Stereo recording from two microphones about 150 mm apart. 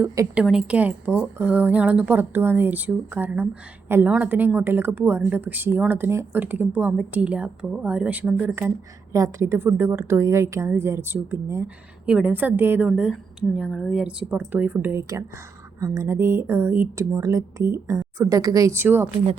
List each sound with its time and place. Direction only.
0.3 s speech: 5° right (ahead or behind)
9.1 s a woman's voice: 20° right (ahead or behind)